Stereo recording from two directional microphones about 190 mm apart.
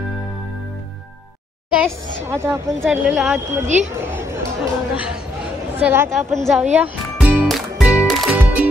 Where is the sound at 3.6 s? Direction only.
40° right (ahead or behind).